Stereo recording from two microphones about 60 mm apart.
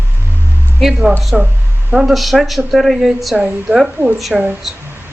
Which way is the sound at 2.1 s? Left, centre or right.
Centre.